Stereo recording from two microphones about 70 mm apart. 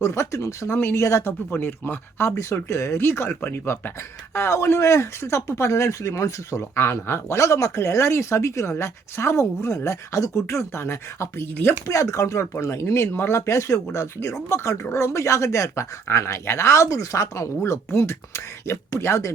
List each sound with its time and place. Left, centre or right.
0.0 s speech: left
0.8 s speech: left
2.3 s speech: left
6.6 s speech: left